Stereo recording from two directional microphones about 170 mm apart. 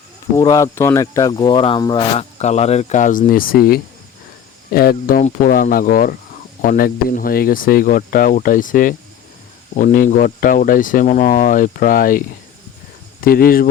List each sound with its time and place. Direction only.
0.3 s speech: 20° left (ahead or behind)
2.1 s speech: 40° left (ahead or behind); by 12.2 s 55° left (ahead or behind)
13.2 s speech: 60° left (ahead or behind)